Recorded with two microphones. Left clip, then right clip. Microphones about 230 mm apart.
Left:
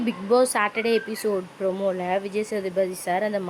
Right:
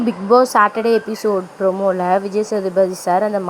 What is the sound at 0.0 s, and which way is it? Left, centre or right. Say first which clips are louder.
Speech: right 8 dB; centre.